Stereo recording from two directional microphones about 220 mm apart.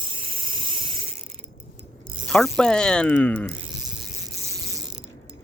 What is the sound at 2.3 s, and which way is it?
Speech, 5° left (ahead or behind).